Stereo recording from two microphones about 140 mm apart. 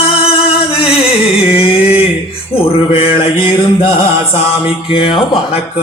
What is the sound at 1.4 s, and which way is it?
Carnatic music, 45° left (ahead or behind).